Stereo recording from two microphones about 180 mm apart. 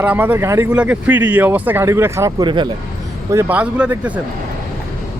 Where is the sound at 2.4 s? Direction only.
25° right (ahead or behind).